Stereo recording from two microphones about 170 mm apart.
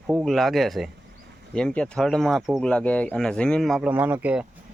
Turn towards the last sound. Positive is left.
turn(degrees=-10)  # may be behind; listen again after turning